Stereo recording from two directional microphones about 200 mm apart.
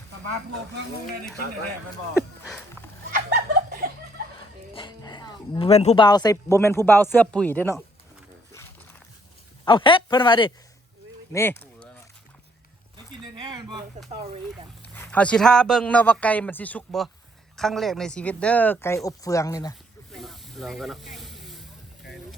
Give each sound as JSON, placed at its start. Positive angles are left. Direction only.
{"t": 1.0, "sound": "speech", "side_deg": 0}
{"t": 3.1, "sound": "laughter", "side_deg": -45}
{"t": 4.4, "sound": "a sound", "side_deg": 25}
{"t": 6.1, "sound": "a man's voice", "side_deg": 20}
{"t": 9.6, "sound": "speech", "side_deg": 25}
{"t": 11.3, "sound": "speech", "side_deg": 10}
{"t": 13.2, "sound": "a sound", "side_deg": -20}
{"t": 14.9, "sound": "a man's voice", "side_deg": 10}
{"t": 20.1, "sound": "snake", "side_deg": 0}